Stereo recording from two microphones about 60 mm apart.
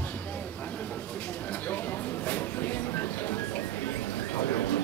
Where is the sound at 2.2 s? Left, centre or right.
Left.